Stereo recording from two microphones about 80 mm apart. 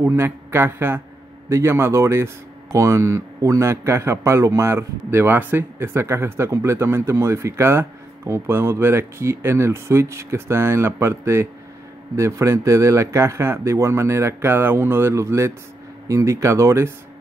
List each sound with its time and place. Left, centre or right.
0.0 s speech: right